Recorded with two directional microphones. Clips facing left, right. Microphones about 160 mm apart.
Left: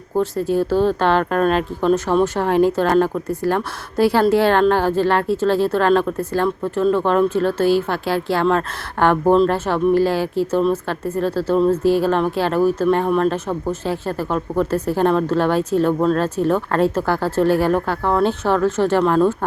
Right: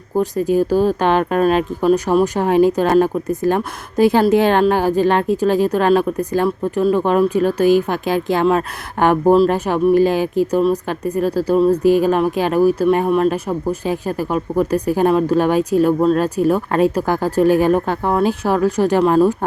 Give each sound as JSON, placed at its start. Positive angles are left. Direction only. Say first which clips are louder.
{"t": 0.2, "sound": "speech", "louder": "right 2 dB", "side_deg": -15}